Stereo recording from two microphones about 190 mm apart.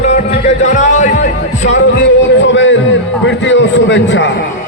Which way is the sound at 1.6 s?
70° left (ahead or behind).